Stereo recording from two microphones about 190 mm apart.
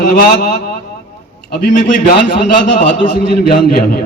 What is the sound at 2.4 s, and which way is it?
A man's voice, 45° left (ahead or behind).